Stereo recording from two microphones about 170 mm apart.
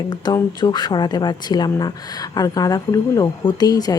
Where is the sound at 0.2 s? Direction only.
25° left (ahead or behind).